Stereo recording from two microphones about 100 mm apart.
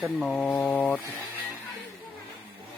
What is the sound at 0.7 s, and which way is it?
Speech, 20° left (ahead or behind).